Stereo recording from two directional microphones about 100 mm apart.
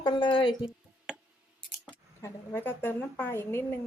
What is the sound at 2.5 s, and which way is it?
A woman's voice, 20° left (ahead or behind).